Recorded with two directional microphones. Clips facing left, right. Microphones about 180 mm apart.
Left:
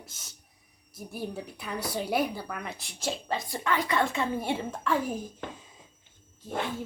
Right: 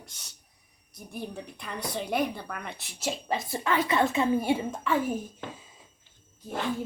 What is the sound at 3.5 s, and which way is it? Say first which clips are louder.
A woman's voice: right 2 dB; 20° right (ahead or behind).